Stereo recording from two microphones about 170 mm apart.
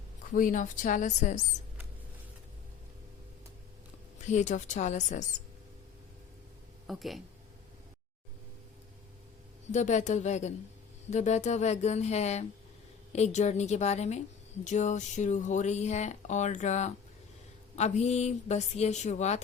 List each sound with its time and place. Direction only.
0.3 s speech: 50° left (ahead or behind)
4.3 s speech: 45° left (ahead or behind)
6.8 s speech: centre (ahead or behind)
9.7 s speech: 45° left (ahead or behind)